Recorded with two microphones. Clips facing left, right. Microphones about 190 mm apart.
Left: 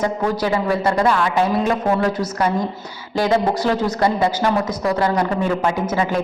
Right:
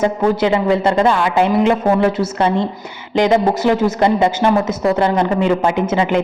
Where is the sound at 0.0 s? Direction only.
25° right (ahead or behind).